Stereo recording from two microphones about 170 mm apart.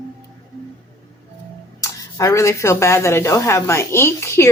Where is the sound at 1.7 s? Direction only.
20° left (ahead or behind).